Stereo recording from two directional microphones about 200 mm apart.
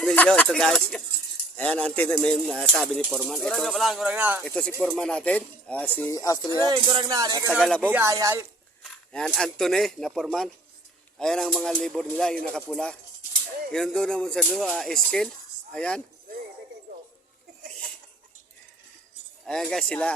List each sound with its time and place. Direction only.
0.0 s speech: 5° left (ahead or behind)
4.4 s speech: 5° left (ahead or behind)
6.6 s speech: 20° right (ahead or behind)
7.5 s speech: 5° left (ahead or behind)
7.9 s speech: 10° right (ahead or behind)
8.8 s speech: centre (ahead or behind)
13.7 s speech: 5° left (ahead or behind)
19.7 s speech: 5° left (ahead or behind)